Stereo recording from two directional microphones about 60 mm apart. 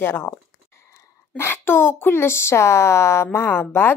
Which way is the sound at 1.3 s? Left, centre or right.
Left.